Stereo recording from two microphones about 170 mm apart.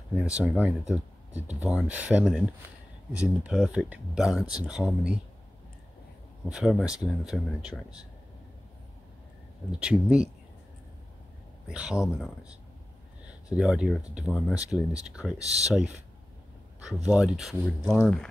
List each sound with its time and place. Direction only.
0.1 s speech: 5° right (ahead or behind)
3.4 s speech: 5° right (ahead or behind)
6.5 s speech: 5° right (ahead or behind)
9.7 s speech: 5° right (ahead or behind)
11.6 s speech: 5° right (ahead or behind)
13.5 s speech: 5° right (ahead or behind)
15.3 s speech: 40° right (ahead or behind)
15.7 s speech: 5° right (ahead or behind)